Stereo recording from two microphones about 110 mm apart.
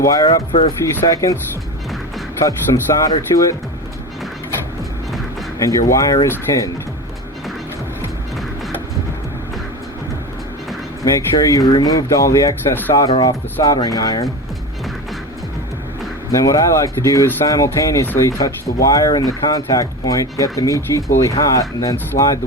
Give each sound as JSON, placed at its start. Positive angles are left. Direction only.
{"t": 0.0, "sound": "speech", "side_deg": 35}
{"t": 2.7, "sound": "speech", "side_deg": 45}
{"t": 3.0, "sound": "speech", "side_deg": 30}
{"t": 5.5, "sound": "speech", "side_deg": 30}
{"t": 11.0, "sound": "speech", "side_deg": 30}
{"t": 16.3, "sound": "speech", "side_deg": 30}
{"t": 22.1, "sound": "speech", "side_deg": 90}